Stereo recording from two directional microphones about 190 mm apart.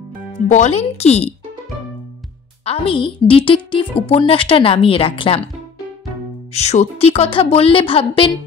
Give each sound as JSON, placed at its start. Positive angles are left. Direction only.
{"t": 0.5, "sound": "speech", "side_deg": 35}
{"t": 2.6, "sound": "speech", "side_deg": 30}
{"t": 6.5, "sound": "speech", "side_deg": 35}